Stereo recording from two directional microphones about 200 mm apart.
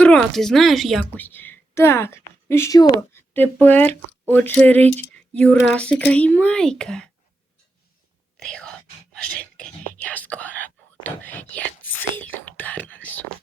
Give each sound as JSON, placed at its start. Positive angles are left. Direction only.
{"t": 0.0, "sound": "a woman's voice", "side_deg": 5}
{"t": 8.4, "sound": "speech", "side_deg": 5}
{"t": 9.2, "sound": "whispering", "side_deg": 5}